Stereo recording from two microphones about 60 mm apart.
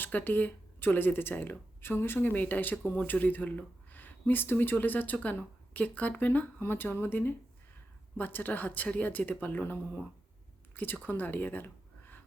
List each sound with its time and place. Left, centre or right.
0.0 s speech: left
11.0 s speech: left